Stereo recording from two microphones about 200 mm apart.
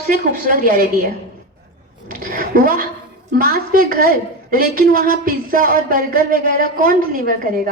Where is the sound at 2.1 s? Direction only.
45° right (ahead or behind).